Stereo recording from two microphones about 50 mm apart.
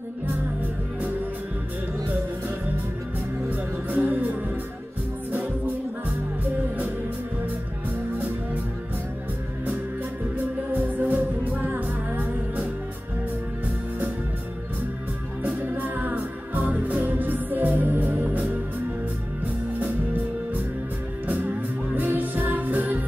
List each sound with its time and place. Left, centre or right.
0.3 s music: right
3.4 s music: right
10.3 s music: right
15.4 s music: right
21.3 s music: right